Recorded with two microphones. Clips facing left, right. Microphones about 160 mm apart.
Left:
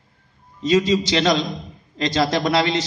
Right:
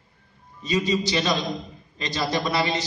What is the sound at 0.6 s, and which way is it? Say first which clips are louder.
A man's voice: left 6 dB; 90° left.